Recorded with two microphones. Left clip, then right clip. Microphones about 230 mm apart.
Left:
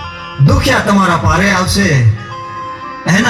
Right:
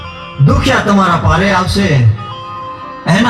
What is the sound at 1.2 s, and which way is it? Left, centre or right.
Speech, left.